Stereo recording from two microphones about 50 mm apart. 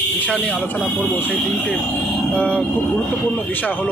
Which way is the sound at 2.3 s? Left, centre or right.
Left.